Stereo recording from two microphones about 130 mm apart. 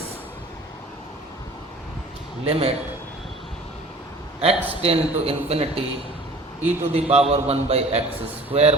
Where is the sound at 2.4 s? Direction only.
50° right (ahead or behind).